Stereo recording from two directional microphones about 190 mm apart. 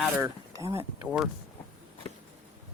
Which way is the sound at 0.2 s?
15° right (ahead or behind).